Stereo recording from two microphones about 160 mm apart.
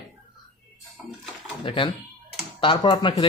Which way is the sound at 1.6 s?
30° left (ahead or behind).